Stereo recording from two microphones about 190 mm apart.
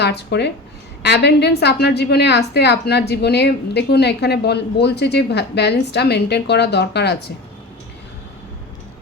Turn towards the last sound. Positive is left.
turn(degrees=60)  # may be behind; listen again after turning